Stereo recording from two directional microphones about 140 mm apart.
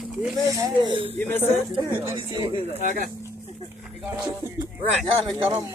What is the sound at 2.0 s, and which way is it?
Speech, 20° right (ahead or behind).